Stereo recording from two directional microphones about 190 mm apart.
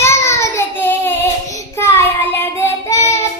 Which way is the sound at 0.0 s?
15° left (ahead or behind).